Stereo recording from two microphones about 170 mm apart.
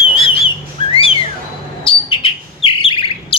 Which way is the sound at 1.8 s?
30° left (ahead or behind).